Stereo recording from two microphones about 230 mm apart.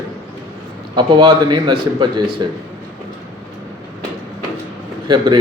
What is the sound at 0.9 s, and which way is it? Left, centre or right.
A man's voice, centre.